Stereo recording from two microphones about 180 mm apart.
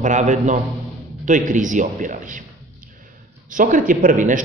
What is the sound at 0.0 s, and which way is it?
A man's voice, 45° right (ahead or behind).